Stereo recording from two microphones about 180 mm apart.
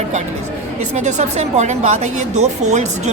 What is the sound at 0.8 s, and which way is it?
A woman's voice, 40° right (ahead or behind).